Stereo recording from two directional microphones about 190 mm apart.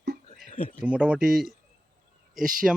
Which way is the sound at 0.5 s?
40° left (ahead or behind).